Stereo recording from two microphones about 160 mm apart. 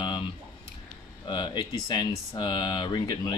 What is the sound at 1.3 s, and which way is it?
Speech, 30° left (ahead or behind).